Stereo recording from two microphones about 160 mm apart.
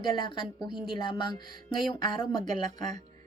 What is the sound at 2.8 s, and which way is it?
Speech, 45° right (ahead or behind).